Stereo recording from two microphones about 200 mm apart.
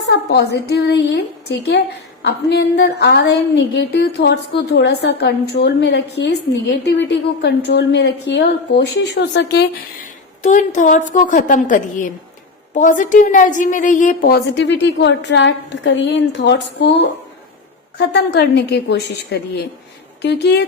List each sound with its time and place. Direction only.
0.0 s a woman's voice: 60° left (ahead or behind)
10.4 s a woman's voice: 40° left (ahead or behind); by 20.7 s 55° left (ahead or behind)